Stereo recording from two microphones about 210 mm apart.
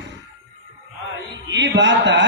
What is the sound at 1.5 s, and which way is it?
Mantra, 55° right (ahead or behind).